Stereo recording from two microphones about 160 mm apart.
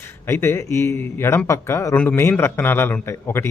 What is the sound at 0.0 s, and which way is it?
Speech, 15° left (ahead or behind).